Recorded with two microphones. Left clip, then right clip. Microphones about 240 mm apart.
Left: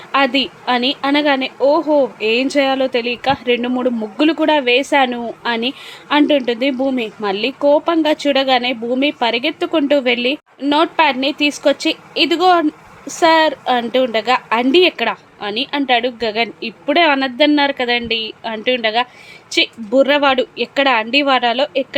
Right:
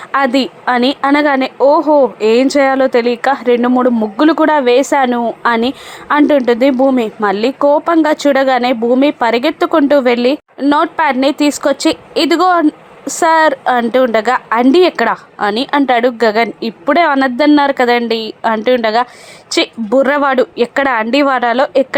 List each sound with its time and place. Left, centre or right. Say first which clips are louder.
0.1 s a woman's voice: right 2 dB; centre
2.1 s speech: right 6 dB; right
2.5 s a woman's voice: right 5 dB; centre